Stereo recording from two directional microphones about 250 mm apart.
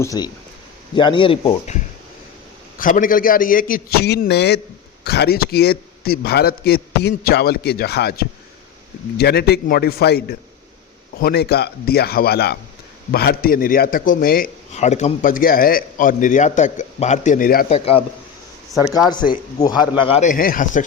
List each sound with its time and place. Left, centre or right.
0.0 s a man's voice: centre
2.7 s a man's voice: left
17.7 s a man's voice: left
19.0 s a man's voice: centre; by 20.8 s left